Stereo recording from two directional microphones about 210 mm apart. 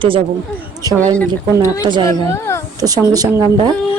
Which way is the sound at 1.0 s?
5° left (ahead or behind).